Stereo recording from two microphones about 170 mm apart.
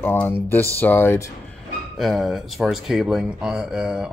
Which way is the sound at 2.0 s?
Centre (ahead or behind).